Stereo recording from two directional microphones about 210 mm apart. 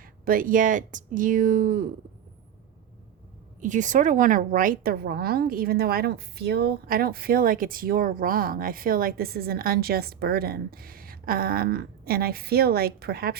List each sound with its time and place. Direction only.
0.0 s speech: 45° right (ahead or behind)
3.6 s a woman's voice: 35° right (ahead or behind)